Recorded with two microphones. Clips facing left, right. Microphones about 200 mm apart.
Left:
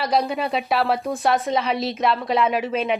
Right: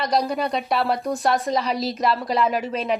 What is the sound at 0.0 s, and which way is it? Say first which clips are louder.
Speech: even; centre (ahead or behind).